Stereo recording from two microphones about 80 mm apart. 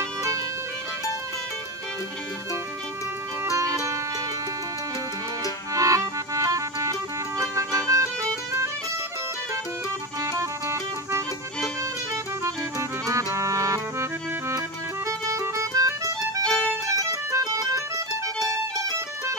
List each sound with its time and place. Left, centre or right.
3.4 s music: right
5.8 s music: right
10.2 s music: right
13.0 s music: right
15.0 s music: right
16.4 s music: centre
16.9 s music: right